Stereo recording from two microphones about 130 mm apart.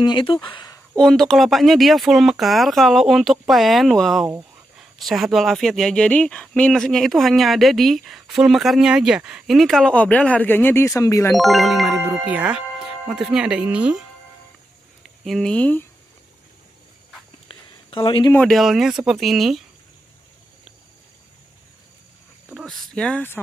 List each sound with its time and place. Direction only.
0.0 s speech: 40° left (ahead or behind)
0.9 s speech: 5° left (ahead or behind); by 11.3 s 25° left (ahead or behind)
11.3 s speech: centre (ahead or behind)
15.0 s speech: centre (ahead or behind)
17.5 s a sound: 40° left (ahead or behind)
18.5 s speech: centre (ahead or behind)
22.5 s speech: centre (ahead or behind)